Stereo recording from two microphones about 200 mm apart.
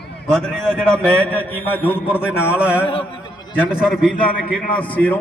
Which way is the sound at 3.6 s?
5° right (ahead or behind).